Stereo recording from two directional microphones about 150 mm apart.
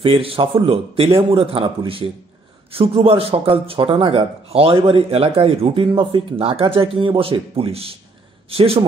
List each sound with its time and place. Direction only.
0.0 s a man's voice: 40° right (ahead or behind)